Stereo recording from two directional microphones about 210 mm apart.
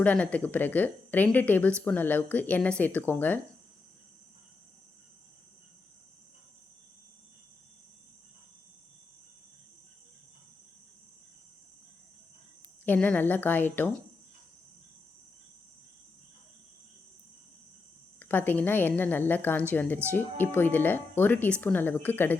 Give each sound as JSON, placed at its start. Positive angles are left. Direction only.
{"t": 0.0, "sound": "speech", "side_deg": 5}
{"t": 12.8, "sound": "speech", "side_deg": 10}
{"t": 18.2, "sound": "speech", "side_deg": 10}